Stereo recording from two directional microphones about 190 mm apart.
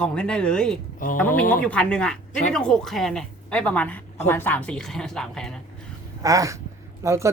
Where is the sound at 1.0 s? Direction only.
45° left (ahead or behind).